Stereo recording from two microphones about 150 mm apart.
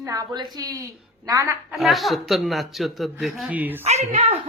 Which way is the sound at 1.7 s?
Centre (ahead or behind).